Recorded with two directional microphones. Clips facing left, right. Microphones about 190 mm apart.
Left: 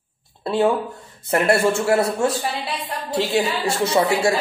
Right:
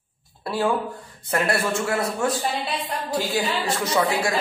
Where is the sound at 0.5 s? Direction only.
25° left (ahead or behind).